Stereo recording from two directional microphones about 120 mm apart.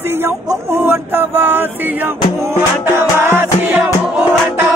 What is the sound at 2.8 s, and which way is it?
Music, 20° right (ahead or behind).